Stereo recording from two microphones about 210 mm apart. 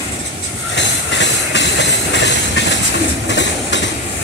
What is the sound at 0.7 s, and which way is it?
Train, 60° left (ahead or behind).